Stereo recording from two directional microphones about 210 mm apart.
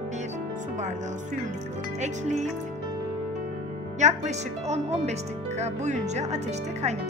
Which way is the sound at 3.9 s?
35° right (ahead or behind).